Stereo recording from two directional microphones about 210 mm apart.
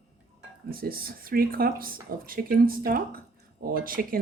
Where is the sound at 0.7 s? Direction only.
45° right (ahead or behind).